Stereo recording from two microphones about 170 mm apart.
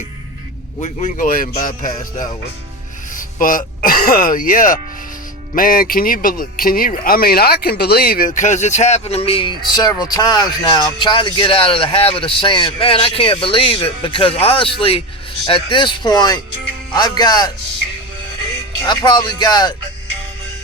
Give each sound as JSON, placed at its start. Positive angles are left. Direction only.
{"t": 0.8, "sound": "a man's voice", "side_deg": 45}
{"t": 18.9, "sound": "speech", "side_deg": 25}